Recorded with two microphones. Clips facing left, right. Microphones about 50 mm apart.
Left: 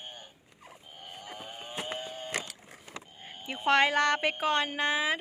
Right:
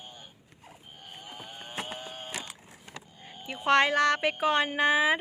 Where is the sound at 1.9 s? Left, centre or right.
Right.